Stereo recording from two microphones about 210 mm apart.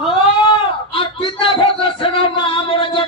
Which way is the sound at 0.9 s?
25° left (ahead or behind).